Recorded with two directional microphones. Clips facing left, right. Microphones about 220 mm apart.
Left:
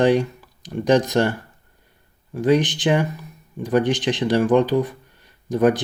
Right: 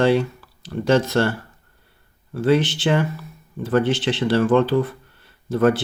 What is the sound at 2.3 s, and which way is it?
Speech, 15° left (ahead or behind).